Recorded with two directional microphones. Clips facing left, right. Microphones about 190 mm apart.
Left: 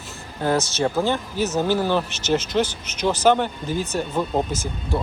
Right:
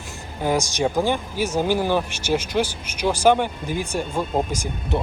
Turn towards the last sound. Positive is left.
turn(degrees=-15)  # may be behind; listen again after turning